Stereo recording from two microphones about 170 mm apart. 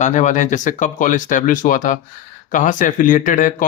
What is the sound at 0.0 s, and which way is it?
Speech, 45° left (ahead or behind).